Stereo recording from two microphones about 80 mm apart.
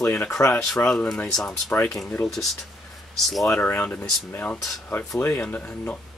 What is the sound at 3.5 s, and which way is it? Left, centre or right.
Speech, left.